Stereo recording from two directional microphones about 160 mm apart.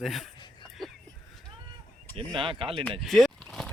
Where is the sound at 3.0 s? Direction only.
Centre (ahead or behind).